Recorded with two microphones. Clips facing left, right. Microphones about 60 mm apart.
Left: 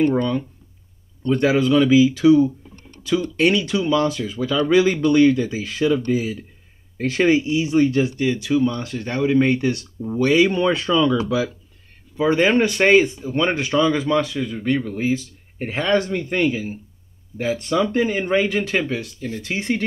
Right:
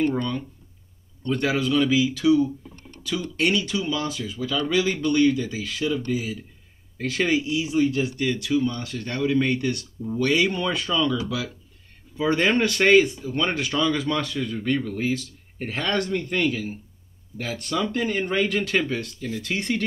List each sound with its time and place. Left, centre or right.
0.0 s speech: centre
3.3 s speech: left
3.9 s speech: left
4.6 s speech: left
7.6 s speech: left
8.0 s speech: centre
12.2 s speech: centre